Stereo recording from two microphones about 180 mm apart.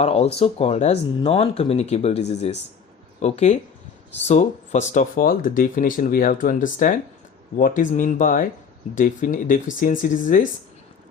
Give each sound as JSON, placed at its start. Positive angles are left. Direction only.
{"t": 0.0, "sound": "speech", "side_deg": 35}